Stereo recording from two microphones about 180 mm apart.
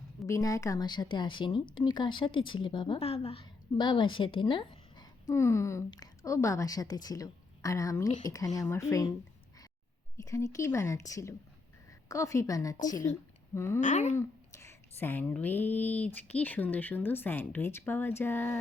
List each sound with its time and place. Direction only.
0.2 s a woman's voice: 15° left (ahead or behind)
10.2 s speech: 20° left (ahead or behind)
13.8 s speech: 40° left (ahead or behind)
14.2 s speech: 15° left (ahead or behind)